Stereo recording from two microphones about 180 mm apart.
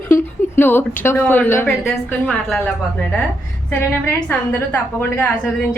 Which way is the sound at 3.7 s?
15° left (ahead or behind).